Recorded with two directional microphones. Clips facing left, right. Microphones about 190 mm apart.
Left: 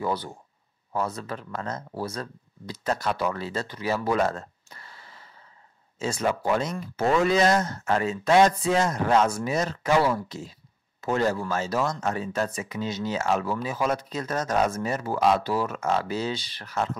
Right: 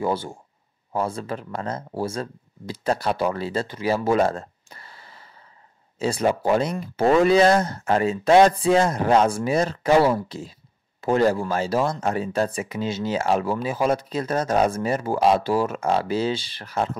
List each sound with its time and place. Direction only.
0.0 s speech: 25° right (ahead or behind)